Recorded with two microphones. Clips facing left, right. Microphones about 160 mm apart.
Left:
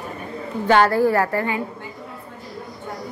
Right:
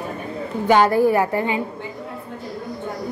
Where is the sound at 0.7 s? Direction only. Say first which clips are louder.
Right 1 dB; 15° right (ahead or behind).